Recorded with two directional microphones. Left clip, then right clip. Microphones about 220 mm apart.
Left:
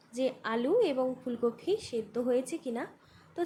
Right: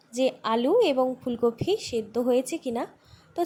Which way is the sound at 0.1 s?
20° right (ahead or behind).